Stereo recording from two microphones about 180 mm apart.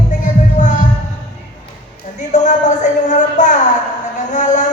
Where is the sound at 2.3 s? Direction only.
40° left (ahead or behind).